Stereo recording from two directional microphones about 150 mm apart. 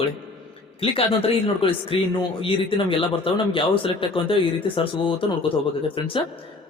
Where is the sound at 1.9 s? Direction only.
40° left (ahead or behind).